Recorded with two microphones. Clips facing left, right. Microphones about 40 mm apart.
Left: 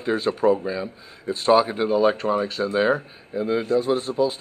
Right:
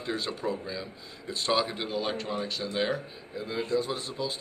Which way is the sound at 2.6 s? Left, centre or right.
Left.